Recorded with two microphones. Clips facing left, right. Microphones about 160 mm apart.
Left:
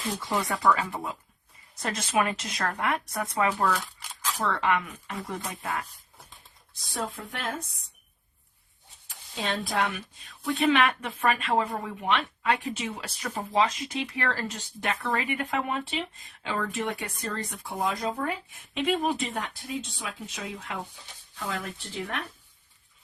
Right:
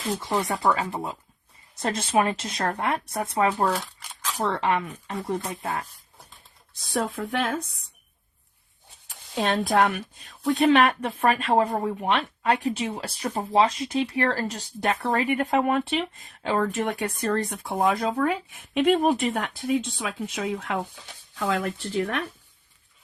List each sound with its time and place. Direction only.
0.2 s speech: 25° right (ahead or behind)
6.9 s speech: 65° right (ahead or behind)
9.0 s speech: 55° right (ahead or behind)
10.2 s speech: 40° right (ahead or behind); by 16.3 s 60° right (ahead or behind)
16.4 s speech: 45° right (ahead or behind); by 20.8 s 65° right (ahead or behind)
21.3 s speech: 90° right